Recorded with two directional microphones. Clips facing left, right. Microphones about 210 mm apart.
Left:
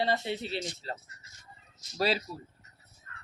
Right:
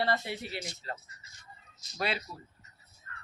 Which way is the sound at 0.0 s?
25° left (ahead or behind).